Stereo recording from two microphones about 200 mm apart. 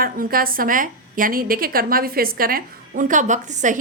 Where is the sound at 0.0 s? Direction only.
45° right (ahead or behind).